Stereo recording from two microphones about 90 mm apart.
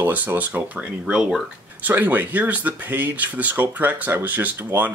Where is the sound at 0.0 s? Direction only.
20° right (ahead or behind).